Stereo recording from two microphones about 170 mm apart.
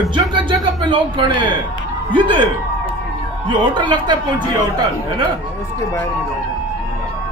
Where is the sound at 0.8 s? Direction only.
30° right (ahead or behind).